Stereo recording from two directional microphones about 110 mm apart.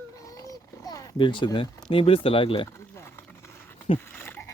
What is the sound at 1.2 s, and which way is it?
Speech, 45° left (ahead or behind).